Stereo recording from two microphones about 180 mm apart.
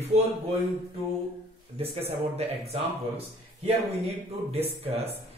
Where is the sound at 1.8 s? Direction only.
35° right (ahead or behind).